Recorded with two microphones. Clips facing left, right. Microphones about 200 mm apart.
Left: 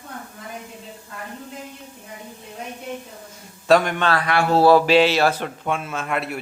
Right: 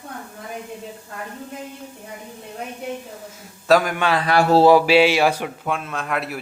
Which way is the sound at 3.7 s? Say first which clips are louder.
Even; 5° right (ahead or behind).